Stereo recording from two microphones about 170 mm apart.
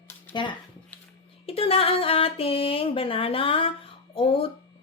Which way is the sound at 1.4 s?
35° left (ahead or behind).